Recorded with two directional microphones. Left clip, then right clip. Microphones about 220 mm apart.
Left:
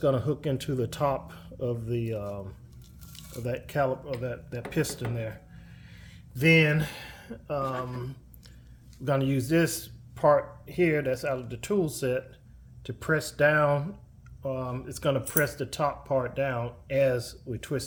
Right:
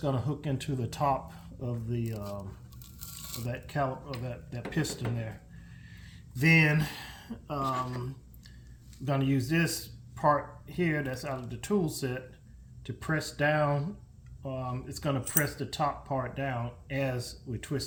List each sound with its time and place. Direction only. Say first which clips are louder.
0.0 s speech: left 7 dB; 45° left (ahead or behind)
3.4 s speech: left 5 dB; 50° left (ahead or behind)
6.4 s speech: left 3 dB; 40° left (ahead or behind)
9.0 s speech: left 4 dB; 45° left (ahead or behind)